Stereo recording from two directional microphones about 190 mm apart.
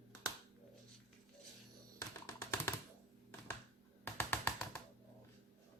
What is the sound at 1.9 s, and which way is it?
Computer keyboard, 15° left (ahead or behind).